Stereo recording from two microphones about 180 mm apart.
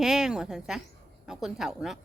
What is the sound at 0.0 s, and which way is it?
A woman's voice, 5° right (ahead or behind).